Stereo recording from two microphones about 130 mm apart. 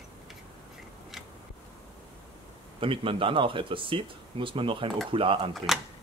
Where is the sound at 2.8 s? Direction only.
45° right (ahead or behind).